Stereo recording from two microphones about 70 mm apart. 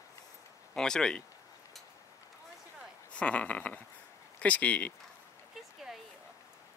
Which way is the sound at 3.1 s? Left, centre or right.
Centre.